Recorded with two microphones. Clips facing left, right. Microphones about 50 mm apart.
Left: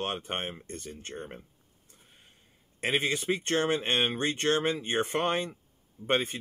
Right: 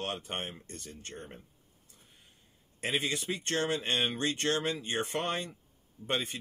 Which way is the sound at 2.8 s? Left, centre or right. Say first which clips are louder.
Left 4 dB; left.